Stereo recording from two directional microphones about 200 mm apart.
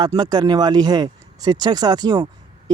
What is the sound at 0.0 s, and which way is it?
Speech, 20° right (ahead or behind).